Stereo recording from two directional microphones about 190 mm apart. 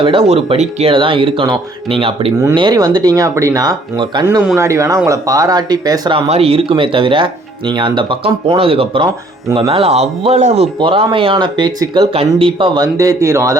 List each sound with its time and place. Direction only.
0.0 s speech: 30° right (ahead or behind)